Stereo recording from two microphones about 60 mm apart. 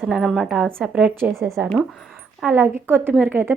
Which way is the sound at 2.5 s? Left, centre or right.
Right.